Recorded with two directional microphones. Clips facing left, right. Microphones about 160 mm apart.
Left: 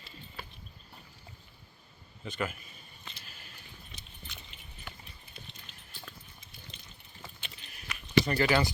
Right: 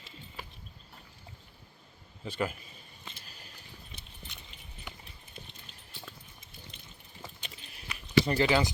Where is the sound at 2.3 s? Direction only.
30° right (ahead or behind).